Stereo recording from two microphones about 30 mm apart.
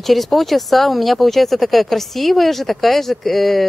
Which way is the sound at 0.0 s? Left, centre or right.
Centre.